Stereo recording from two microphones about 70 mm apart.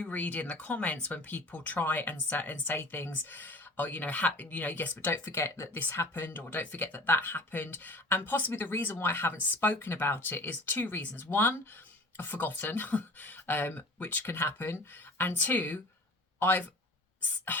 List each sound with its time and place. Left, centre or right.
0.0 s speech: left